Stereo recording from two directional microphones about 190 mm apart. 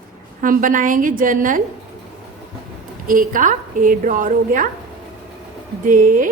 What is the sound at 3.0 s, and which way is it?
A woman's voice, 45° right (ahead or behind).